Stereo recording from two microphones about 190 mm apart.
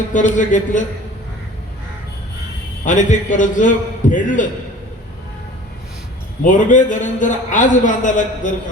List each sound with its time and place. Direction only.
0.1 s a man's voice: 40° left (ahead or behind)
2.8 s a man's voice: 40° left (ahead or behind)
6.4 s a man's voice: 40° left (ahead or behind)